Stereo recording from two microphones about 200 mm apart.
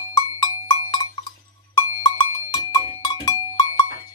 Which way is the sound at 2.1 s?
20° left (ahead or behind).